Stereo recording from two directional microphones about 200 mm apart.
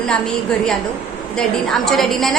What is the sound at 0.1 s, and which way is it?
A woman's voice, 5° left (ahead or behind).